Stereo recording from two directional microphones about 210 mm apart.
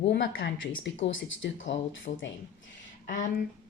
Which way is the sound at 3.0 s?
35° left (ahead or behind).